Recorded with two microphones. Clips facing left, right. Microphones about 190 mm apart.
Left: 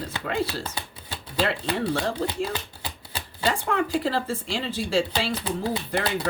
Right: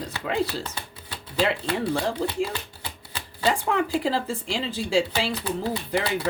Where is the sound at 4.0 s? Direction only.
15° right (ahead or behind).